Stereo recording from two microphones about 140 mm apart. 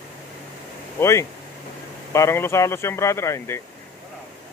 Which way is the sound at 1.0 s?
20° left (ahead or behind).